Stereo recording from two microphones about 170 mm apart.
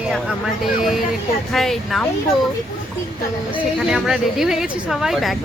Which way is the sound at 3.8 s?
Centre (ahead or behind).